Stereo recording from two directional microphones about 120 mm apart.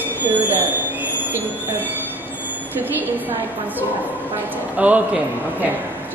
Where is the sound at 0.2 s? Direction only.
15° right (ahead or behind).